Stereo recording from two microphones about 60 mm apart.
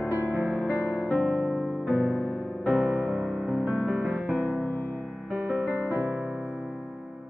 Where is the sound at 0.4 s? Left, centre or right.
Centre.